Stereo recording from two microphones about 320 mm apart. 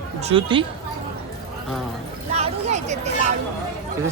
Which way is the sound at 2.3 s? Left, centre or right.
Right.